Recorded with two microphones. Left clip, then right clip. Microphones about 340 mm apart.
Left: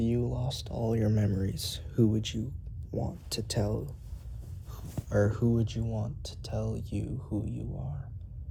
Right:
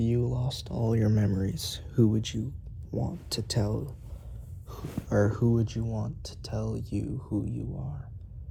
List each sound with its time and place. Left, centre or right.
0.0 s a sound: right
3.1 s speech: centre
7.3 s speech: right